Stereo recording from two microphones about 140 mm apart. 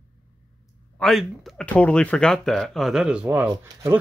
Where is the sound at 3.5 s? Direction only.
30° right (ahead or behind).